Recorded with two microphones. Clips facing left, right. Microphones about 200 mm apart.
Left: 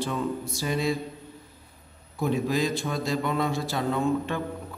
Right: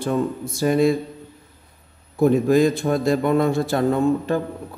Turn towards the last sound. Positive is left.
turn(degrees=-45)  # may be behind; listen again after turning